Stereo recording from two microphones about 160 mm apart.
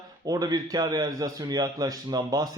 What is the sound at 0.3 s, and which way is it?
Speech, 25° right (ahead or behind).